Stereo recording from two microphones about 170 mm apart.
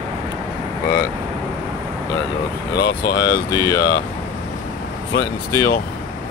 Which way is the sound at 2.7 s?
90° left.